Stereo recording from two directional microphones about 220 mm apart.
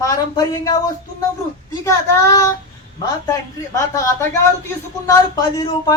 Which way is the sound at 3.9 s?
15° left (ahead or behind).